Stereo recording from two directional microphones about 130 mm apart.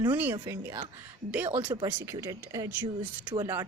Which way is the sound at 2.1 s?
25° right (ahead or behind).